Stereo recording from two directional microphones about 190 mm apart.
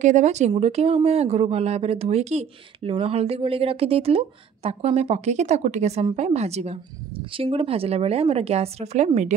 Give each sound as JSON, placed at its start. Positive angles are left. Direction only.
{"t": 0.0, "sound": "speech", "side_deg": -40}